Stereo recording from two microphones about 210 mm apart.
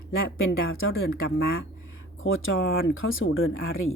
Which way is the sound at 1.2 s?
60° left (ahead or behind).